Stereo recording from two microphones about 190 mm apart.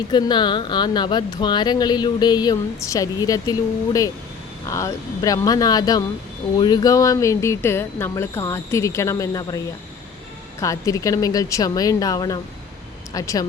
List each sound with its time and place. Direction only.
0.1 s speech: 25° left (ahead or behind)
10.6 s speech: 15° left (ahead or behind)